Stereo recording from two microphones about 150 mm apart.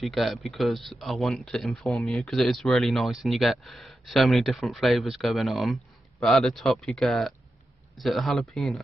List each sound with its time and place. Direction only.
0.0 s speech: centre (ahead or behind)